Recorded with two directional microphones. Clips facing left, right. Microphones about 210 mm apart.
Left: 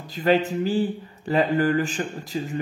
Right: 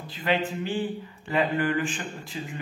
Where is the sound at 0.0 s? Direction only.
40° left (ahead or behind).